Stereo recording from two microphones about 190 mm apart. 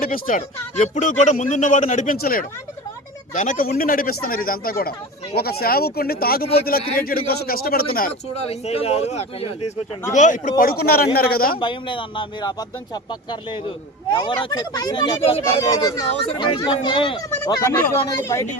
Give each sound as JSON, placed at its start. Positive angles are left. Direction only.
{"t": 0.0, "sound": "a man's voice", "side_deg": 45}
{"t": 8.4, "sound": "a man's voice", "side_deg": 30}
{"t": 10.6, "sound": "a man's voice", "side_deg": 50}
{"t": 11.6, "sound": "speech", "side_deg": 25}
{"t": 17.3, "sound": "speech", "side_deg": 10}